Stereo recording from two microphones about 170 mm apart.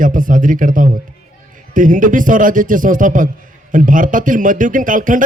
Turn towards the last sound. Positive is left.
turn(degrees=-50)  # may be behind; listen again after turning